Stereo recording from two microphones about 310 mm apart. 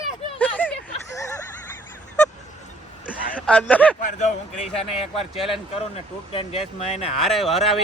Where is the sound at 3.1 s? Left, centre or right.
Centre.